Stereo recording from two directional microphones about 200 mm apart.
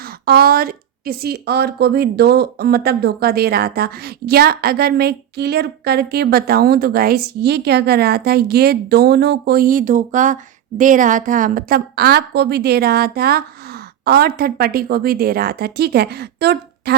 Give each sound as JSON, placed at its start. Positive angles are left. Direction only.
{"t": 0.3, "sound": "speech", "side_deg": -50}